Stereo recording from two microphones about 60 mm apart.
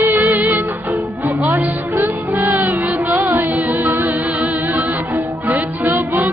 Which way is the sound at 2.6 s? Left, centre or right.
Right.